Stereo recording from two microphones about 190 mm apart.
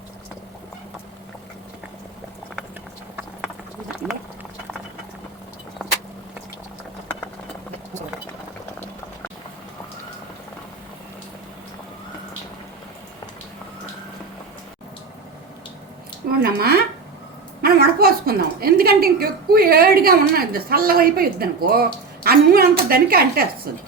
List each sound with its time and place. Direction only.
4.0 s speech: 5° right (ahead or behind)
16.4 s a woman's voice: 50° right (ahead or behind)